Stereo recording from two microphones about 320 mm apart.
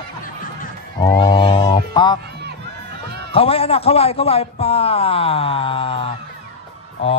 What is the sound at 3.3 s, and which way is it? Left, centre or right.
A man's voice, centre.